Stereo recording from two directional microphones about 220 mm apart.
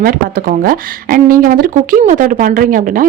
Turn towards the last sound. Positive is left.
turn(degrees=-40)  # may be behind; listen again after turning